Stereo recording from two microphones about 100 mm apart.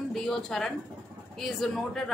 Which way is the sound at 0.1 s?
5° left (ahead or behind).